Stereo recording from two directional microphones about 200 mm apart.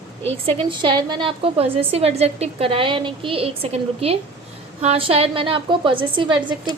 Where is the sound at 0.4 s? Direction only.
25° right (ahead or behind).